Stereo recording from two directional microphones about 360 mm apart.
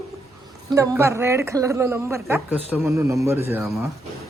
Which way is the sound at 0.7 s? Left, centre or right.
Centre.